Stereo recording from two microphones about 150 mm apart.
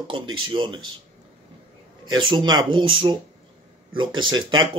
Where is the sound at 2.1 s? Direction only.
30° right (ahead or behind).